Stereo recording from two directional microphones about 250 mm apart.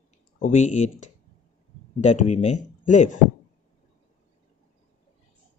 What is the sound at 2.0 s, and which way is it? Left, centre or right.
Speech, left.